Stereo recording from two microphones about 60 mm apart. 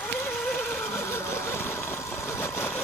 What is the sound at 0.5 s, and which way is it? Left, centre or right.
Neigh, left.